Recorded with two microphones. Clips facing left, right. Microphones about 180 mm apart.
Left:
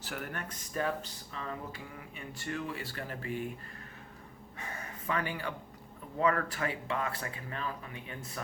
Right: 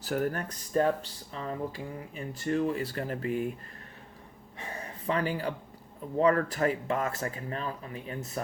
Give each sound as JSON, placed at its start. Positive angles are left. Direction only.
{"t": 0.0, "sound": "speech", "side_deg": -40}
{"t": 4.6, "sound": "a sound", "side_deg": -30}
{"t": 6.1, "sound": "speech", "side_deg": -35}